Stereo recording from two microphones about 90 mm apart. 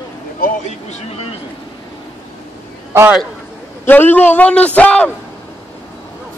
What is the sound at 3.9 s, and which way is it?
A man's voice, 20° left (ahead or behind).